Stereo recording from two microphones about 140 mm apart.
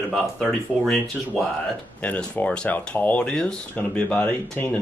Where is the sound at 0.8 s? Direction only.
Centre (ahead or behind).